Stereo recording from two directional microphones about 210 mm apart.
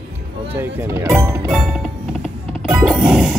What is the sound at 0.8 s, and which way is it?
Speech, 10° right (ahead or behind).